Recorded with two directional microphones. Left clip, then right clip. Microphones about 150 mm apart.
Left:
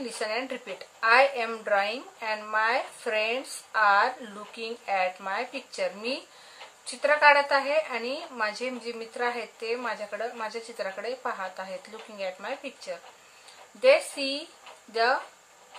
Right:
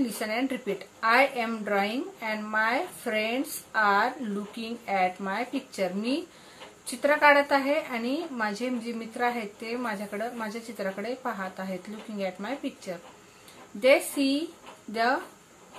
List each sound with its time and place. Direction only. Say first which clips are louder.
0.2 s a woman's voice: right 1 dB; 25° left (ahead or behind)